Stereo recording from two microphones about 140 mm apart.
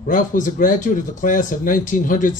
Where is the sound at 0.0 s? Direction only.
70° left (ahead or behind).